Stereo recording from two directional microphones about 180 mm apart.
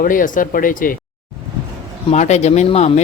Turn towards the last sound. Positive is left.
turn(degrees=35)  # may be behind; listen again after turning